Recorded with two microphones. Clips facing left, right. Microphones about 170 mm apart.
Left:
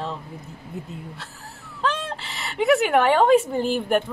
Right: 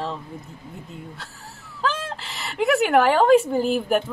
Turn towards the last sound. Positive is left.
turn(degrees=0)  # may be behind; listen again after turning